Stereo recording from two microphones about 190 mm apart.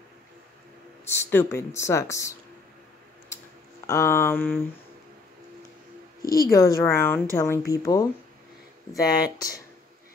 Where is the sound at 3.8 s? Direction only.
15° left (ahead or behind).